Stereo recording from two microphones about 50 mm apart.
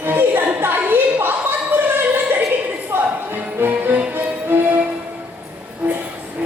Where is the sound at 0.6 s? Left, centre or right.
Right.